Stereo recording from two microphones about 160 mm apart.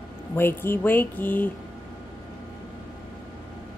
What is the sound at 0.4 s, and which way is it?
Speech, 15° left (ahead or behind).